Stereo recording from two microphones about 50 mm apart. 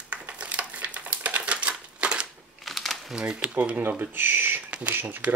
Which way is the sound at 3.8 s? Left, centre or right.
Right.